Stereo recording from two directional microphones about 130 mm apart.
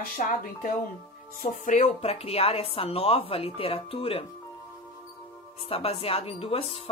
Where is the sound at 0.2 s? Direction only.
90° left.